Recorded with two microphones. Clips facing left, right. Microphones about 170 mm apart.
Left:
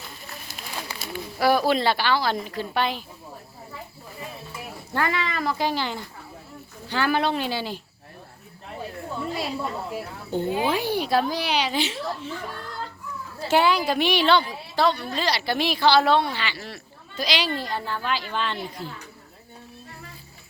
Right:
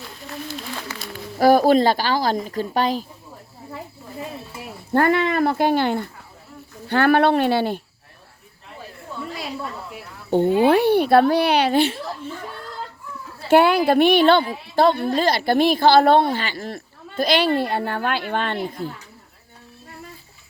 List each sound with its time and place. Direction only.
0.0 s a sound: 10° left (ahead or behind)
1.4 s a woman's voice: 45° right (ahead or behind)
4.9 s speech: 55° right (ahead or behind)
10.3 s speech: 65° right (ahead or behind)
13.5 s a woman's voice: 55° right (ahead or behind)